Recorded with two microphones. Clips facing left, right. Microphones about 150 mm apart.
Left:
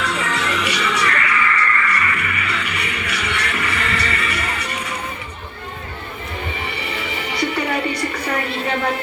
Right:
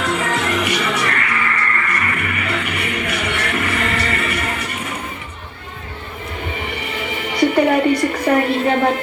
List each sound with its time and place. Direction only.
0.0 s music: 50° right (ahead or behind)
6.7 s music: 50° right (ahead or behind)